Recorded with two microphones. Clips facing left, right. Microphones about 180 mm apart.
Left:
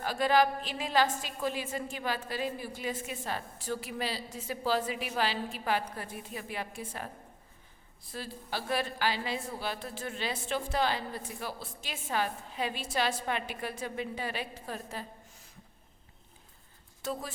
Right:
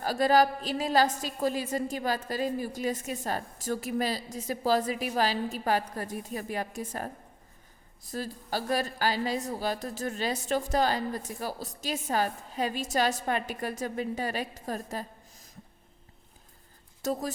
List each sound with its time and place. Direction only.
0.0 s a woman's voice: 40° right (ahead or behind)
17.0 s speech: 40° right (ahead or behind)